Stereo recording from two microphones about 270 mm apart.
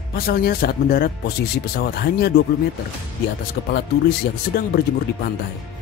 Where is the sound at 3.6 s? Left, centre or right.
Left.